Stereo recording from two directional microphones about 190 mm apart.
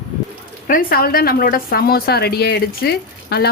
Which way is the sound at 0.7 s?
50° left (ahead or behind).